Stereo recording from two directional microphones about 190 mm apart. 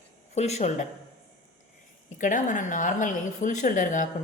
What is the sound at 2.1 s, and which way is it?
A woman's voice, 45° left (ahead or behind).